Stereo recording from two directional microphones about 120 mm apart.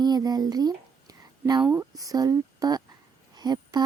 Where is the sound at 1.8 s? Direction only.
30° right (ahead or behind).